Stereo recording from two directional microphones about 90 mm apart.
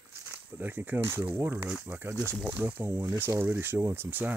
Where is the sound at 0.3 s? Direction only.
20° right (ahead or behind).